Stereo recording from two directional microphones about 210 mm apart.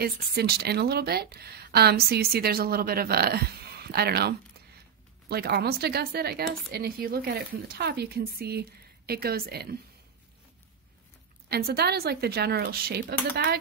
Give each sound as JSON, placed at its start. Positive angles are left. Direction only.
{"t": 0.0, "sound": "speech", "side_deg": -50}
{"t": 11.4, "sound": "speech", "side_deg": -50}